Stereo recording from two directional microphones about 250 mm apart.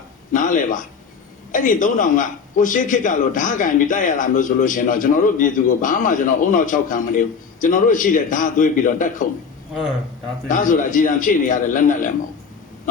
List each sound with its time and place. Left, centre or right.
0.3 s a man's voice: left
10.5 s a man's voice: left